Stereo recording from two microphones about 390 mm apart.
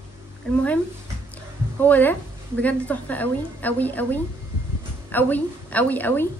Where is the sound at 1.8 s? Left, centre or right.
Centre.